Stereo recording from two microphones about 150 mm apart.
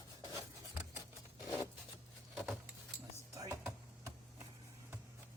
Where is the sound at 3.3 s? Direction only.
20° right (ahead or behind).